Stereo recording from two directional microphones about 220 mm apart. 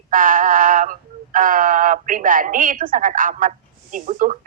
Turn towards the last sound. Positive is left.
turn(degrees=-35)  # may be behind; listen again after turning